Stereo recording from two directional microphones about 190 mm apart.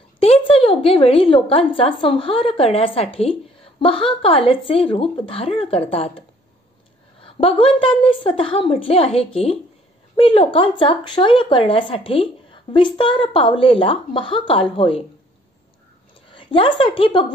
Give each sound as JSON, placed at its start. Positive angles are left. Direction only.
{"t": 0.2, "sound": "a woman's voice", "side_deg": 30}
{"t": 16.3, "sound": "a woman's voice", "side_deg": 25}